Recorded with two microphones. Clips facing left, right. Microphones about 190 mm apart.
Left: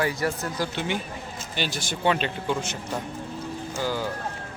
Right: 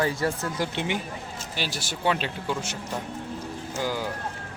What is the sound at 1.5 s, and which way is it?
Speech, 5° right (ahead or behind).